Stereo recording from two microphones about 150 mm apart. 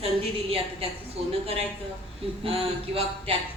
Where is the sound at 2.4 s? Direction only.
40° right (ahead or behind).